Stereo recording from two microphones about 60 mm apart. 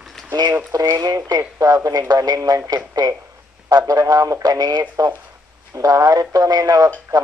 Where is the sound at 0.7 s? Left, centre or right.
Right.